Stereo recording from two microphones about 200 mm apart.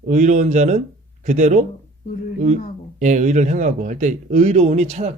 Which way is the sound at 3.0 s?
40° right (ahead or behind).